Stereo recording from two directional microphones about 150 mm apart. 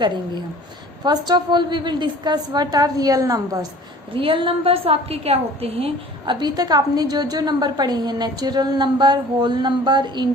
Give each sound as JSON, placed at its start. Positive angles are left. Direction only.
{"t": 1.0, "sound": "a woman's voice", "side_deg": -30}
{"t": 4.1, "sound": "a woman's voice", "side_deg": -35}
{"t": 6.4, "sound": "a woman's voice", "side_deg": -25}